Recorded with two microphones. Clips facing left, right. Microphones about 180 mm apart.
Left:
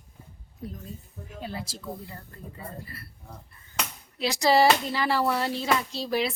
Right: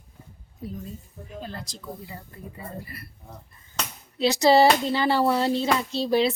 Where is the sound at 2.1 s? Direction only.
15° right (ahead or behind).